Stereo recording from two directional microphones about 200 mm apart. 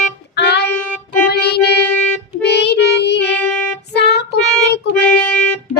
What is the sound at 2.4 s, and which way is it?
Child singing, 55° left (ahead or behind).